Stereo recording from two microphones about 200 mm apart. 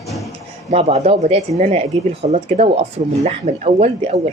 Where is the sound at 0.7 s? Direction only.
35° right (ahead or behind).